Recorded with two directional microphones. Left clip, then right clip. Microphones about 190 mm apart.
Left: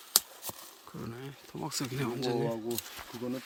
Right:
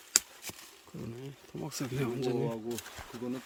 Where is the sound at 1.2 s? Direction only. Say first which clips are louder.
Left 2 dB; centre (ahead or behind).